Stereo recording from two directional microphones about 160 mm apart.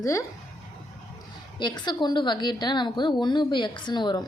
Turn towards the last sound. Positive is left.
turn(degrees=30)  # may be behind; listen again after turning